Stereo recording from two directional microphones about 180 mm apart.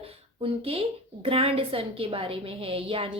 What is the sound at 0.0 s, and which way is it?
A woman's voice, 30° right (ahead or behind).